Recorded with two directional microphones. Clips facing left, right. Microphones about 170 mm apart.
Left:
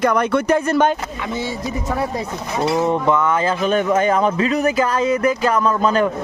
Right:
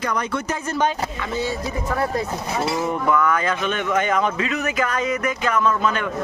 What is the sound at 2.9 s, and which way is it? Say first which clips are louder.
Speech: left 3 dB; 25° left (ahead or behind).